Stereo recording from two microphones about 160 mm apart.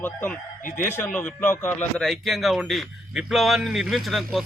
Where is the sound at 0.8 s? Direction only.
15° left (ahead or behind).